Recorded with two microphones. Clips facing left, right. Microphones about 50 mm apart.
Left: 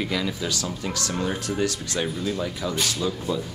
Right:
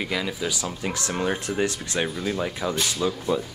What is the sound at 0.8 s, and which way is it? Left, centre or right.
Speech, right.